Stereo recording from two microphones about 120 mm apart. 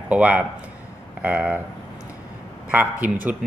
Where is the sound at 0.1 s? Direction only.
15° right (ahead or behind).